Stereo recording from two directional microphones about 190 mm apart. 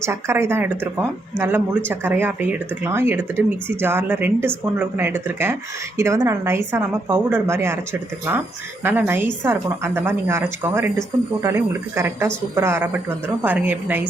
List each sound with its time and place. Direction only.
0.0 s speech: 15° right (ahead or behind)
8.8 s speech: 10° right (ahead or behind)